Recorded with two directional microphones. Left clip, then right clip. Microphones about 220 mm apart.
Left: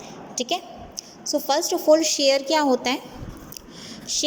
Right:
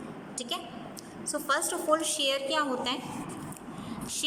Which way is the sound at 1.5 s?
15° left (ahead or behind).